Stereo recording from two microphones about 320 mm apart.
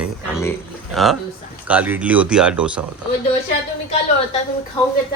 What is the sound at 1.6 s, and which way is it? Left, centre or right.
Speech, centre.